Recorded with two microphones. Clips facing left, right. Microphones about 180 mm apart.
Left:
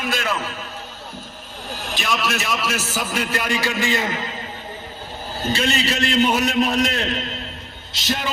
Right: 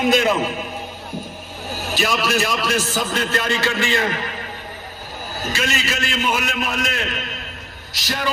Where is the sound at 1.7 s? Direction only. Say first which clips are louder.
Right 3 dB; 5° right (ahead or behind); by 4.4 s 20° left (ahead or behind).